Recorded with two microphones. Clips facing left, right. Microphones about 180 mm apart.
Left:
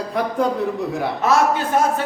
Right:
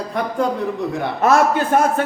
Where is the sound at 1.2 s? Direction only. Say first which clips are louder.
Right 3 dB; 55° right (ahead or behind).